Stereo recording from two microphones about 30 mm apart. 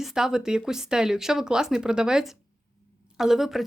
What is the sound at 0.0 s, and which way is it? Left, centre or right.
Speech, centre.